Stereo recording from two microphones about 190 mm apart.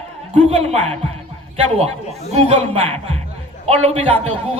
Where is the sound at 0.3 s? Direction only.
35° right (ahead or behind).